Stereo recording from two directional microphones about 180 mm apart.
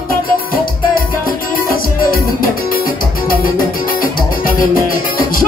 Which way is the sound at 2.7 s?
50° left (ahead or behind).